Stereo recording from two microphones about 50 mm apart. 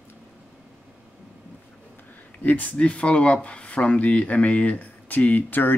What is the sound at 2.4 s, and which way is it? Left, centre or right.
Speech, left.